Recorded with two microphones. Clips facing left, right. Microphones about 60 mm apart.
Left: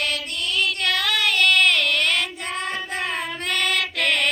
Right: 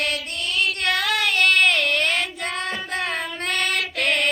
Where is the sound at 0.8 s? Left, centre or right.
Right.